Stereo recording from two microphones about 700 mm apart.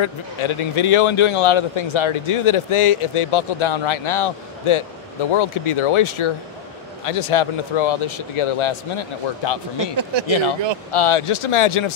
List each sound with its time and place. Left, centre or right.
0.0 s a man's voice: left